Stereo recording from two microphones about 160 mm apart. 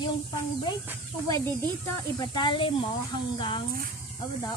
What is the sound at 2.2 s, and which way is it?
Speech, 30° left (ahead or behind).